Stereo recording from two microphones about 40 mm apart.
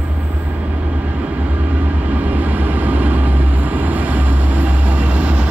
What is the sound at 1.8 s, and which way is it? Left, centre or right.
Vehicle, right.